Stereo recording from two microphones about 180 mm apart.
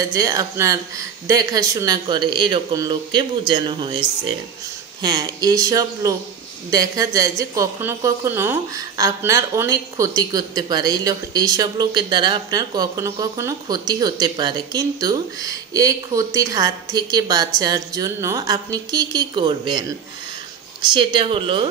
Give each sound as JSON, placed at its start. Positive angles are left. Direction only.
{"t": 0.1, "sound": "a woman's voice", "side_deg": -20}
{"t": 5.0, "sound": "a woman's voice", "side_deg": -20}
{"t": 20.8, "sound": "a woman's voice", "side_deg": -25}